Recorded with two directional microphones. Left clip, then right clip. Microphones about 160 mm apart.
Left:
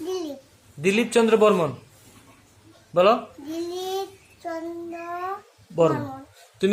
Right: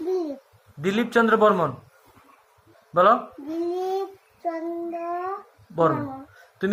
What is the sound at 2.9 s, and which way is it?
Speech, 15° left (ahead or behind).